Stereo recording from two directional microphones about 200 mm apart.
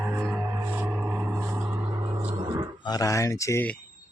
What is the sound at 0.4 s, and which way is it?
Music, 10° right (ahead or behind).